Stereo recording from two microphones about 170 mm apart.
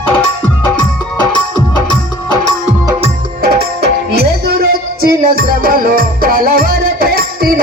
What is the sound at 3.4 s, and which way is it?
Music, 65° right (ahead or behind).